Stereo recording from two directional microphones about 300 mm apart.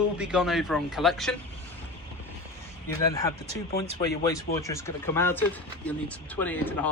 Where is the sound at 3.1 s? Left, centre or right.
Centre.